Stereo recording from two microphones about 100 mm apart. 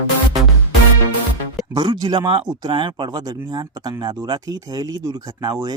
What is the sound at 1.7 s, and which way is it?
Speech, 50° right (ahead or behind).